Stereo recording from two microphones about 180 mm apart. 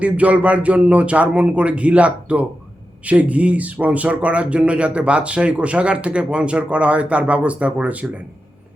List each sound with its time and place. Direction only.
0.0 s speech: 10° right (ahead or behind)